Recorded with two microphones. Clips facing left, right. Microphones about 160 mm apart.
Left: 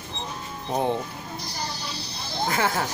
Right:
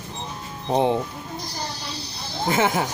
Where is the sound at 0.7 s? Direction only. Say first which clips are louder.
Right 5 dB; 20° right (ahead or behind).